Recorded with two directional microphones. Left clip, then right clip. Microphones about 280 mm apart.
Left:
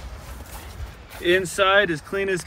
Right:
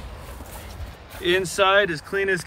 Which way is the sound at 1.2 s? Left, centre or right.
Centre.